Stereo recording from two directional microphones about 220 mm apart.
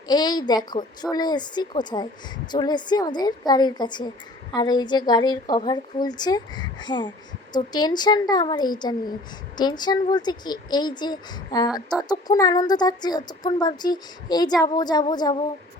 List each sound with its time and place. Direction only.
0.1 s speech: 20° left (ahead or behind)